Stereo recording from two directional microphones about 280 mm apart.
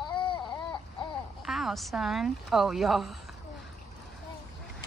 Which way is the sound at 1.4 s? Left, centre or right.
Centre.